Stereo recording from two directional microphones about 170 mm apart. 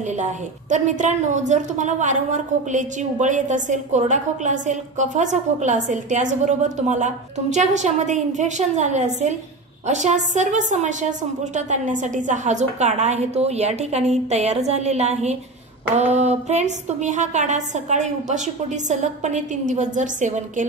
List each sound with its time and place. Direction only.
0.2 s a woman's voice: 45° right (ahead or behind)